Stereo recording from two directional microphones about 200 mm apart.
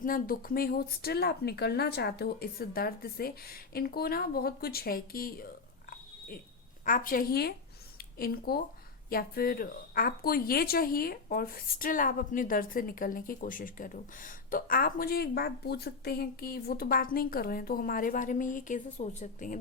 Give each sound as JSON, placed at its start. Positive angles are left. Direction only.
{"t": 0.0, "sound": "speech", "side_deg": 45}
{"t": 6.8, "sound": "speech", "side_deg": 45}